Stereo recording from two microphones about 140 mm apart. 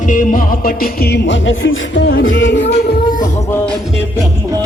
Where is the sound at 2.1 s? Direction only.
90° left.